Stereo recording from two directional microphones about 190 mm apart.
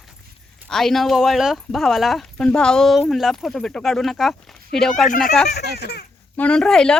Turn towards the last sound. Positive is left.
turn(degrees=5)  # may be behind; listen again after turning